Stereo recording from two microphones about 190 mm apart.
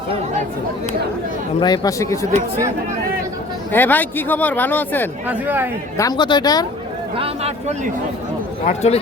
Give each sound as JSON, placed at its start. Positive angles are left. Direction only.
{"t": 1.5, "sound": "a woman's voice", "side_deg": 20}
{"t": 3.7, "sound": "speech", "side_deg": 10}
{"t": 5.3, "sound": "speech", "side_deg": -10}
{"t": 6.0, "sound": "a woman's voice", "side_deg": 20}
{"t": 7.2, "sound": "speech", "side_deg": -35}
{"t": 8.6, "sound": "a man's voice", "side_deg": 35}